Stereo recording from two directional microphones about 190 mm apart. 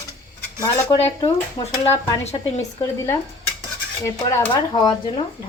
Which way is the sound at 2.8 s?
15° left (ahead or behind).